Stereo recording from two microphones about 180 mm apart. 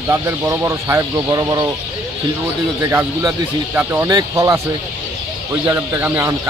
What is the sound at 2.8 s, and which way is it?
Speech, 15° right (ahead or behind).